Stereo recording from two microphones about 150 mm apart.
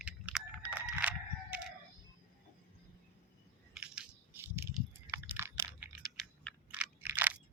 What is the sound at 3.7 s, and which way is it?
Crushing, 5° right (ahead or behind).